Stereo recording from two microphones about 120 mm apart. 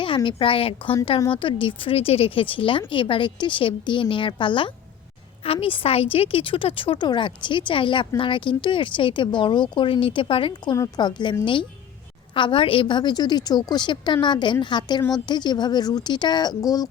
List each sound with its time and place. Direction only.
0.0 s a woman's voice: 45° left (ahead or behind)
10.8 s a woman's voice: 35° left (ahead or behind)